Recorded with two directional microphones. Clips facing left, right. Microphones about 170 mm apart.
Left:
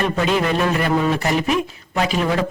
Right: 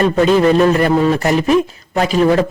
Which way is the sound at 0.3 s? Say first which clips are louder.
Right 9 dB; 35° right (ahead or behind).